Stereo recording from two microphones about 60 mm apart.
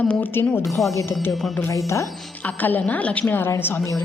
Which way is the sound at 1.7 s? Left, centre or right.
Left.